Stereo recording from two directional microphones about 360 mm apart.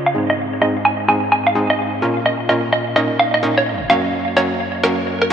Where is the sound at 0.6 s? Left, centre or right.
Centre.